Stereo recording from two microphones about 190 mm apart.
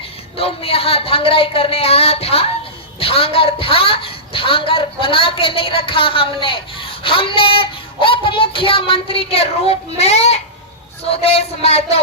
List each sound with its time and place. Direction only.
0.3 s a woman's voice: 30° left (ahead or behind)